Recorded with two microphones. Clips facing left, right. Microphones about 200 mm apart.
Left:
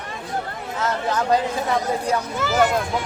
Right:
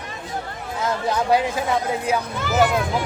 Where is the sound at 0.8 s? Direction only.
10° right (ahead or behind).